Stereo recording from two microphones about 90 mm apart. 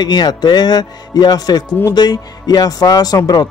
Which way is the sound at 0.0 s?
50° left (ahead or behind).